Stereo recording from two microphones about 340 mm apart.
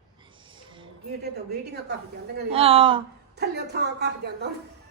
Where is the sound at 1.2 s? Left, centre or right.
Right.